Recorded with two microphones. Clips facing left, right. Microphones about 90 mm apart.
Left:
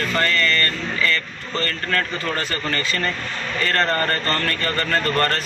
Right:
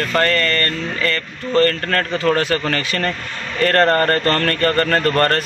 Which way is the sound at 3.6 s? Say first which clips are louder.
Right 7 dB; 55° right (ahead or behind).